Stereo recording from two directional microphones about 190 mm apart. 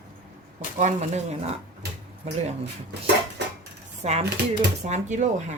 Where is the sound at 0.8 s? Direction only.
35° right (ahead or behind).